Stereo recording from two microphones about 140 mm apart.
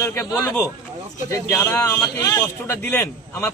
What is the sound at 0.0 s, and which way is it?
Speech, 15° left (ahead or behind).